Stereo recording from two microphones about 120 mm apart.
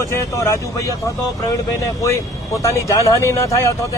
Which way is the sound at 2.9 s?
25° left (ahead or behind).